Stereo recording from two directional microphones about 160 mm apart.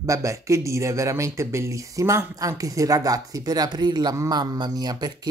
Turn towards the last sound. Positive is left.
turn(degrees=-25)  # may be behind; listen again after turning